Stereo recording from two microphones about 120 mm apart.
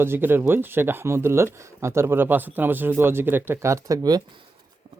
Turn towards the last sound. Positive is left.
turn(degrees=-30)  # may be behind; listen again after turning